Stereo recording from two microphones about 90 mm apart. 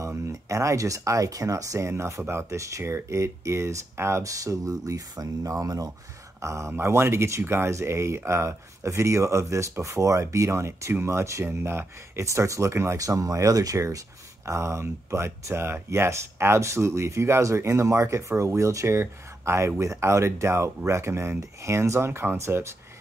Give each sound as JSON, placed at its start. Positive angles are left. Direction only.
{"t": 0.0, "sound": "speech", "side_deg": -35}